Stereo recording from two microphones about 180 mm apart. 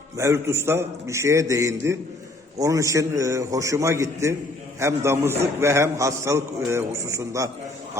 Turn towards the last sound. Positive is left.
turn(degrees=-15)  # may be behind; listen again after turning